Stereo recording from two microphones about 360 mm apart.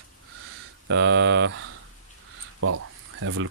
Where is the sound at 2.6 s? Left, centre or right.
Right.